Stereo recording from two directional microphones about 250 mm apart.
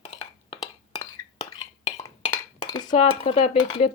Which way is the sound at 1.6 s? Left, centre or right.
Left.